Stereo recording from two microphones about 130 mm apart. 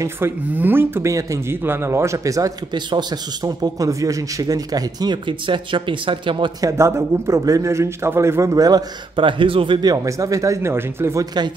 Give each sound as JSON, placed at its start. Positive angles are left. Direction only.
{"t": 0.0, "sound": "speech", "side_deg": -15}
{"t": 6.6, "sound": "speech", "side_deg": -20}